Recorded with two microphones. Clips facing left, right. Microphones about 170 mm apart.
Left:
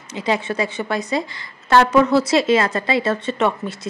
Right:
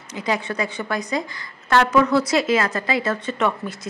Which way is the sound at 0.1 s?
25° left (ahead or behind).